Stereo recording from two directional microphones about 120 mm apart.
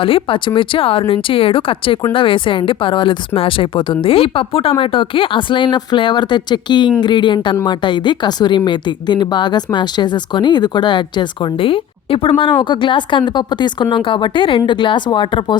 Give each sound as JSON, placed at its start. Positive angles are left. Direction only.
{"t": 0.0, "sound": "a woman's voice", "side_deg": 45}